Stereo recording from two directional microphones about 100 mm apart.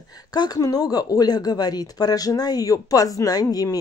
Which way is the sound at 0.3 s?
40° left (ahead or behind).